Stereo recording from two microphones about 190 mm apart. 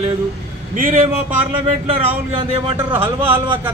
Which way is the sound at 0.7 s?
45° right (ahead or behind).